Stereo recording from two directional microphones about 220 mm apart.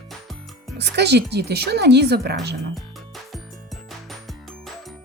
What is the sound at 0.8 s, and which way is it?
Speech, 50° right (ahead or behind).